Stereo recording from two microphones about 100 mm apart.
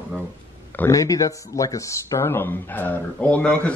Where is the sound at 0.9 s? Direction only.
35° left (ahead or behind).